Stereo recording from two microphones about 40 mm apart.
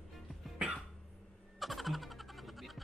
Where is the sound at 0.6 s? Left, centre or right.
Centre.